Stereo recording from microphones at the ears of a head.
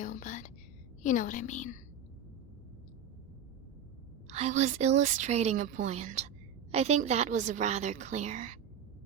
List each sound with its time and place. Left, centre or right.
0.0 s whispering: left
1.0 s a woman's voice: left
4.3 s a woman's voice: right